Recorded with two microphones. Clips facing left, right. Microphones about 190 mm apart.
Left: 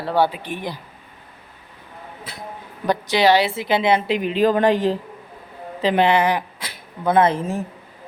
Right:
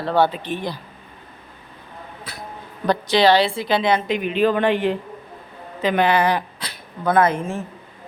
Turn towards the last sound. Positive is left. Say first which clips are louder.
# left 1 dB
turn(degrees=35)  # may be behind; listen again after turning